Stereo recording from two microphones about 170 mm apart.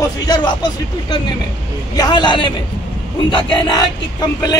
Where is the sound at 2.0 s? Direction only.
25° left (ahead or behind).